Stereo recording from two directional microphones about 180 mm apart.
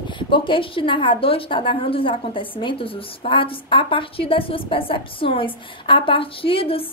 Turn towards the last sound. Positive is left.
turn(degrees=30)  # may be behind; listen again after turning